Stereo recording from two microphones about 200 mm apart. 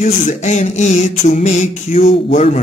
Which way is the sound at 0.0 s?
35° left (ahead or behind).